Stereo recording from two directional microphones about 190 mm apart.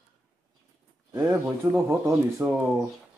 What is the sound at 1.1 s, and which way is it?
Speech, 10° right (ahead or behind).